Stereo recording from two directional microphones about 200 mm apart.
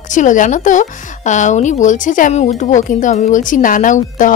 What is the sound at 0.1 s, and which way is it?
A woman's voice, 40° left (ahead or behind).